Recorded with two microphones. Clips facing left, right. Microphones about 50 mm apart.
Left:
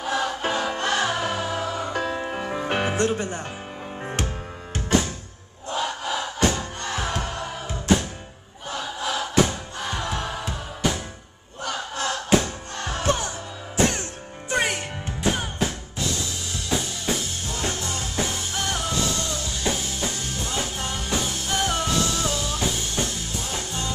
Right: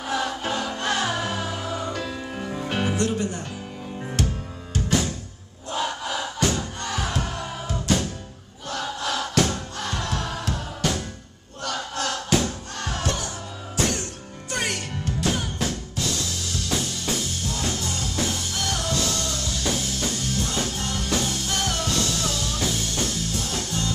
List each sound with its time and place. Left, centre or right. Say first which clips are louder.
0.1 s music: left 1 dB; left
8.6 s choir: even; centre
11.6 s music: even; left
17.5 s music: left 1 dB; left